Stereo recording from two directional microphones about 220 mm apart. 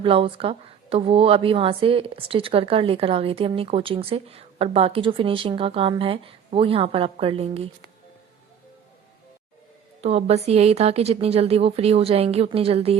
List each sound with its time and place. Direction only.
0.0 s speech: 25° right (ahead or behind)
10.0 s speech: 30° right (ahead or behind)